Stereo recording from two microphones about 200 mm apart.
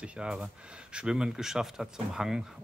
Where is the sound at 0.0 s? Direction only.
5° right (ahead or behind).